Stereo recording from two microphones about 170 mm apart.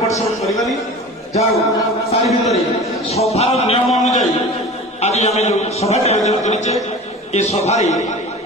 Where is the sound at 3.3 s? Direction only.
40° left (ahead or behind).